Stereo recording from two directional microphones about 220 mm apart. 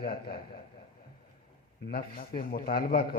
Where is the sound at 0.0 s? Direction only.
40° left (ahead or behind).